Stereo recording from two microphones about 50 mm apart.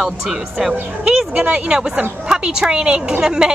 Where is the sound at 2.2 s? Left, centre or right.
Centre.